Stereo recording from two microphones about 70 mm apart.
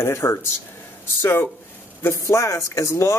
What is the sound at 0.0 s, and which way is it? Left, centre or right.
Speech, left.